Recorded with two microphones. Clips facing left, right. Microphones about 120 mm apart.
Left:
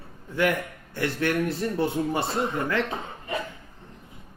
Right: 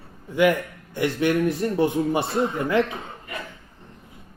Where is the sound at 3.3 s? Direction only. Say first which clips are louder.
Left 5 dB; 25° left (ahead or behind).